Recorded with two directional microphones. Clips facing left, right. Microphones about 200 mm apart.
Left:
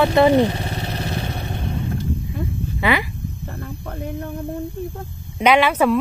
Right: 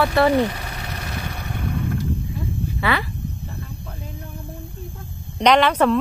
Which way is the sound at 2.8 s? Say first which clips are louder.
Left 3 dB; 15° left (ahead or behind).